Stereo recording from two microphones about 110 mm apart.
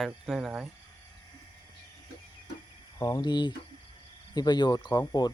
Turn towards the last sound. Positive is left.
turn(degrees=40)  # may be behind; listen again after turning